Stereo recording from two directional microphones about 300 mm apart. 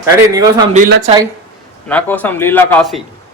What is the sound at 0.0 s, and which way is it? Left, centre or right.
Speech, centre.